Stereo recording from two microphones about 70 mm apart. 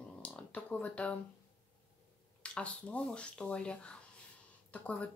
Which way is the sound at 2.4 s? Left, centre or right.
Centre.